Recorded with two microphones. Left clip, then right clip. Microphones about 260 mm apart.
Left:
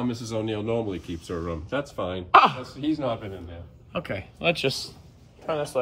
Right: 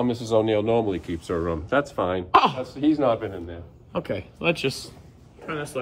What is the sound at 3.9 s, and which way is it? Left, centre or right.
Speech, centre.